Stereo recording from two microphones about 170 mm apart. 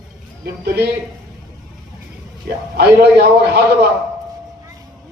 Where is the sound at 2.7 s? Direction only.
70° right (ahead or behind).